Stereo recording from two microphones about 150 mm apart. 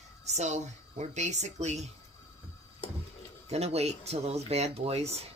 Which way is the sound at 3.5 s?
45° right (ahead or behind).